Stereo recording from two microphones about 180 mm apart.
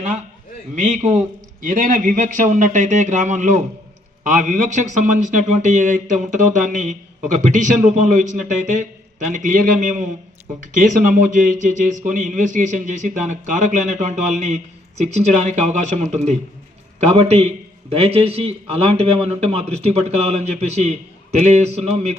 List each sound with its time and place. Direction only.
0.8 s a man's voice: 45° right (ahead or behind)